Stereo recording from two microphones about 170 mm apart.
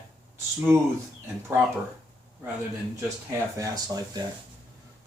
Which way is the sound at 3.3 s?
20° right (ahead or behind).